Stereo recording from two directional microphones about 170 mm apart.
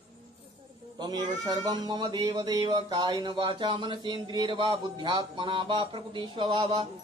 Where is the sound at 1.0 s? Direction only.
25° right (ahead or behind).